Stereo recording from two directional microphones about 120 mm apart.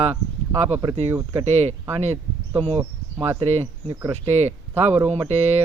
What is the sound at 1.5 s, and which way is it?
Speech, 60° right (ahead or behind).